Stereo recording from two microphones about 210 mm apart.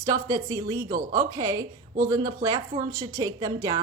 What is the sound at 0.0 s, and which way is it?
Speech, 20° right (ahead or behind).